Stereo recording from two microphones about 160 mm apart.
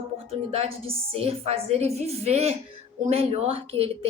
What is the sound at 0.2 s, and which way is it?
A woman's voice, 40° right (ahead or behind).